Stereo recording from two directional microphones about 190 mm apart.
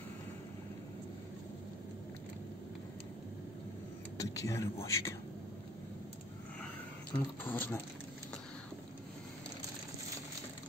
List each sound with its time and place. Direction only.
4.2 s a man's voice: 15° left (ahead or behind)
7.4 s a man's voice: 10° left (ahead or behind)